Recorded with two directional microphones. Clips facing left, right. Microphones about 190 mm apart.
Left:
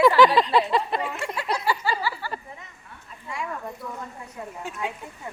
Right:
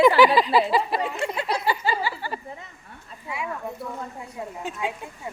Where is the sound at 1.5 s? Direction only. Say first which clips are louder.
Even; 20° right (ahead or behind).